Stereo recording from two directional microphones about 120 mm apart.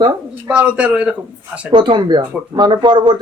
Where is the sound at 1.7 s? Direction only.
40° right (ahead or behind).